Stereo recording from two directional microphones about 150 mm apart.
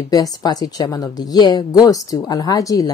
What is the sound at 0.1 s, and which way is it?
A woman's voice, 25° left (ahead or behind).